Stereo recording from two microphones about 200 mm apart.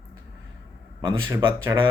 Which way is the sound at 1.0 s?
20° right (ahead or behind).